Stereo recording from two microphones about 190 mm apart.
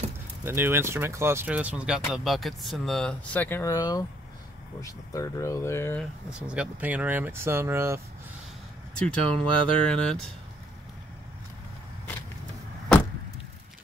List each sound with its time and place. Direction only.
0.5 s speech: 10° right (ahead or behind); by 6.0 s 15° left (ahead or behind)
6.4 s speech: 5° right (ahead or behind)
8.9 s speech: 5° left (ahead or behind)